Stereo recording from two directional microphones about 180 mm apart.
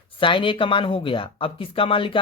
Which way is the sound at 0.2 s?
30° left (ahead or behind).